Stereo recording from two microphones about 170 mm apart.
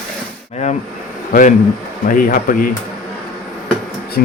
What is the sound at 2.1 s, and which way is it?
Speech, 55° left (ahead or behind).